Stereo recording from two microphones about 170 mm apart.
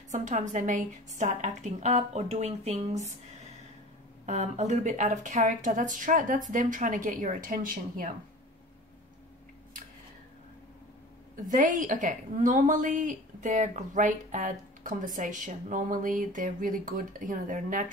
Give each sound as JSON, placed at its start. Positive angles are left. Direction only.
{"t": 0.1, "sound": "a woman's voice", "side_deg": -45}
{"t": 4.3, "sound": "a woman's voice", "side_deg": -45}
{"t": 11.4, "sound": "a woman's voice", "side_deg": -50}